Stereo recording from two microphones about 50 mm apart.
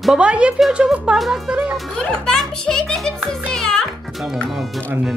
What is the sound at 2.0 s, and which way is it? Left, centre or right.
A child's voice, centre.